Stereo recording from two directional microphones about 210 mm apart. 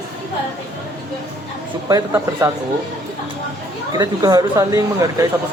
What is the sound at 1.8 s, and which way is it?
Speech, 15° right (ahead or behind).